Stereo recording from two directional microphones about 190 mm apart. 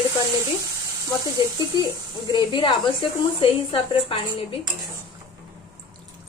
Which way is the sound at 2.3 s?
25° left (ahead or behind).